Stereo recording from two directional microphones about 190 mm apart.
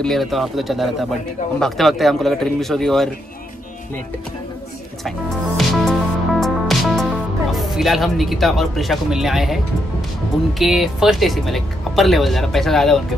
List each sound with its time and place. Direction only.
0.0 s speech: centre (ahead or behind)
5.6 s music: centre (ahead or behind)
10.6 s speech: centre (ahead or behind)